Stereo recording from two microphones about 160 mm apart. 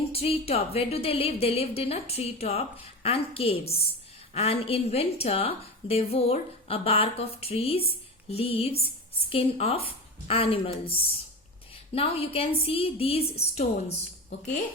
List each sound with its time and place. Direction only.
0.1 s a woman's voice: 40° left (ahead or behind)